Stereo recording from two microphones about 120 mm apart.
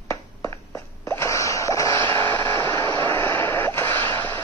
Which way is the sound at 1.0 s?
20° left (ahead or behind).